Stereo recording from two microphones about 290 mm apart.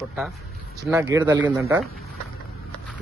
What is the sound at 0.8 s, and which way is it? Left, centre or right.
Speech, centre.